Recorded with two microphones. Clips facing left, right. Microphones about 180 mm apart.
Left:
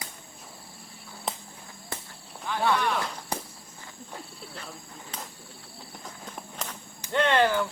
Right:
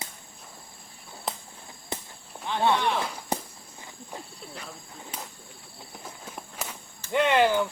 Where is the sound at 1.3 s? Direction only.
Centre (ahead or behind).